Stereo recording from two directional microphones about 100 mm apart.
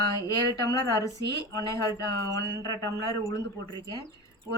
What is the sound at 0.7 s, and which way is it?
Speech, 35° left (ahead or behind).